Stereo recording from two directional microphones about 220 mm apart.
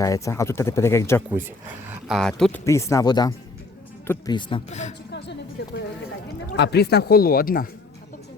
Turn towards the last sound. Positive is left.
turn(degrees=40)  # may be behind; listen again after turning